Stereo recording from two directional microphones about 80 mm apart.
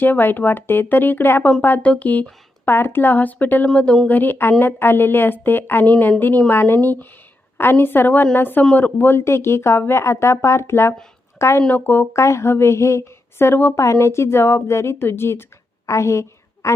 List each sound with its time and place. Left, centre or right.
0.0 s a woman's voice: left